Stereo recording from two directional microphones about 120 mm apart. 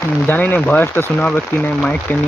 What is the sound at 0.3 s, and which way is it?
Speech, 15° left (ahead or behind).